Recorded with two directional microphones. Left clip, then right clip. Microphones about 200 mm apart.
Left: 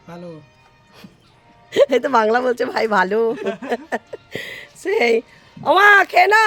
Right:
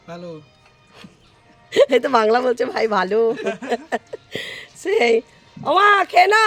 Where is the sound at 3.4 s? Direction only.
25° right (ahead or behind).